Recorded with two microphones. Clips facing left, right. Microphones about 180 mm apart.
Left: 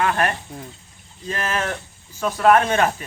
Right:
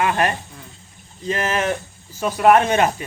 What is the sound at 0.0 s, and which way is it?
Speech, 15° right (ahead or behind).